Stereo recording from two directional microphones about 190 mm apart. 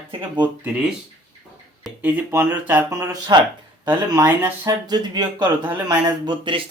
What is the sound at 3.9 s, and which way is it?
Speech, 10° right (ahead or behind).